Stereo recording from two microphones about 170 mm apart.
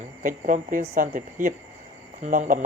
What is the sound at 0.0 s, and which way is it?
Speech, 50° right (ahead or behind).